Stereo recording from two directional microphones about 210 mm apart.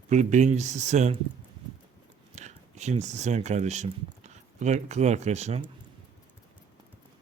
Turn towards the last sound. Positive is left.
turn(degrees=-30)  # may be behind; listen again after turning